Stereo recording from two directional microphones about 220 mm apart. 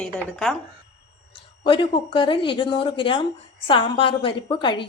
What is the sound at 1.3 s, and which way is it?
A woman's voice, 25° left (ahead or behind).